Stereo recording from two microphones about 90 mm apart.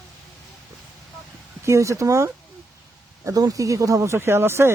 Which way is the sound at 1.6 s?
35° right (ahead or behind).